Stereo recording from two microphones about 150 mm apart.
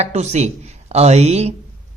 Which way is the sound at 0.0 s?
50° right (ahead or behind).